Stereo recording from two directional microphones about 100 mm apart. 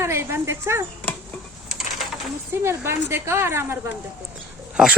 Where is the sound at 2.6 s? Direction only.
25° right (ahead or behind).